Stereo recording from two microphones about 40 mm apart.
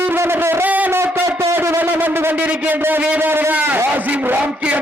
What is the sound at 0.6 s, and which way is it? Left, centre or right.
Speech, right.